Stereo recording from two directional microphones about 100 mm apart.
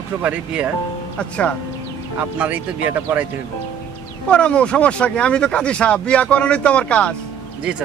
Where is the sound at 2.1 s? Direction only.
15° right (ahead or behind).